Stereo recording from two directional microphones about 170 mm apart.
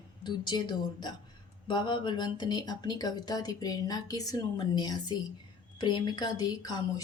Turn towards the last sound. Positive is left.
turn(degrees=25)  # may be behind; listen again after turning